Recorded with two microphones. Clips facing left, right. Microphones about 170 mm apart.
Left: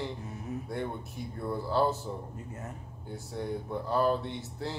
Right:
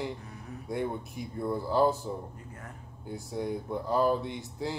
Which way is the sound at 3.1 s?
10° right (ahead or behind).